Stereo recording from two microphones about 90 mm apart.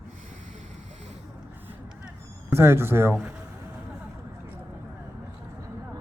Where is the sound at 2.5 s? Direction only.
30° right (ahead or behind).